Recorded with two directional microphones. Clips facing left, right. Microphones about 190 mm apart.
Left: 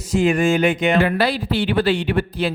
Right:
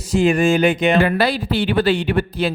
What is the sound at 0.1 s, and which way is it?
Speech, 30° right (ahead or behind).